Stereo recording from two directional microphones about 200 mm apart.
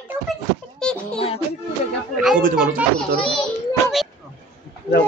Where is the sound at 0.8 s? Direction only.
5° left (ahead or behind).